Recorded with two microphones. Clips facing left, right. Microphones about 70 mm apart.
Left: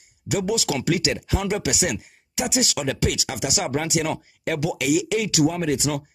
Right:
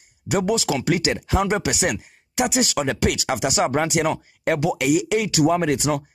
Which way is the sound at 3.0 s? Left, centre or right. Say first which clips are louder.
Right 4 dB; right.